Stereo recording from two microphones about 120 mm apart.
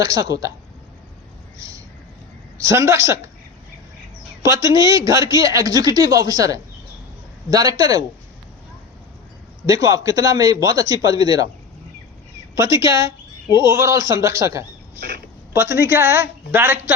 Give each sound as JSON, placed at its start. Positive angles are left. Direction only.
{"t": 0.0, "sound": "speech", "side_deg": -30}
{"t": 1.5, "sound": "a sound", "side_deg": -25}
{"t": 2.6, "sound": "speech", "side_deg": -25}
{"t": 4.5, "sound": "a man's voice", "side_deg": -25}
{"t": 9.6, "sound": "speech", "side_deg": -25}
{"t": 12.5, "sound": "speech", "side_deg": -25}